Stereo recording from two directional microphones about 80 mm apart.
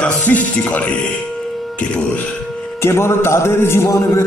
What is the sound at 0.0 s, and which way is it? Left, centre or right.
Speech, centre.